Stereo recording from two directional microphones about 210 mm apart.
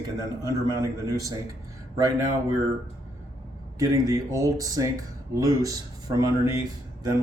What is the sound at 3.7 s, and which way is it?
Speech, 15° right (ahead or behind).